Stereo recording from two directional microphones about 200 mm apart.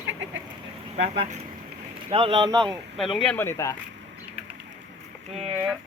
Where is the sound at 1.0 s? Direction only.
30° right (ahead or behind).